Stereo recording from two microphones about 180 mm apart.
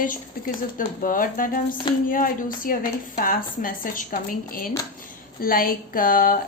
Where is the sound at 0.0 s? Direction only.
50° left (ahead or behind).